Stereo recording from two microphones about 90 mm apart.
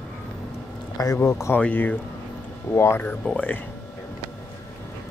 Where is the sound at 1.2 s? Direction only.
30° left (ahead or behind).